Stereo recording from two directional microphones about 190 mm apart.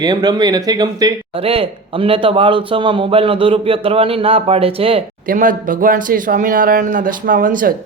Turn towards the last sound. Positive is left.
turn(degrees=-45)  # may be behind; listen again after turning